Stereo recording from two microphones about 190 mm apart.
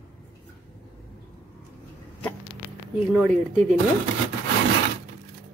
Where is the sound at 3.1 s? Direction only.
5° right (ahead or behind).